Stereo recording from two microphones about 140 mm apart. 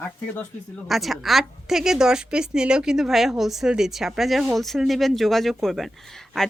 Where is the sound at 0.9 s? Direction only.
Centre (ahead or behind).